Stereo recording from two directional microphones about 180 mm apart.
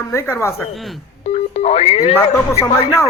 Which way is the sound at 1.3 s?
35° left (ahead or behind).